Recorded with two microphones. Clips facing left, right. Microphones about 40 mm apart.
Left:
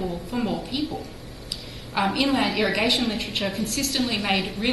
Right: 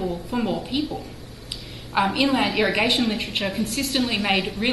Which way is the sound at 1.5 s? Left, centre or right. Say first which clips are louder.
Right 4 dB; centre.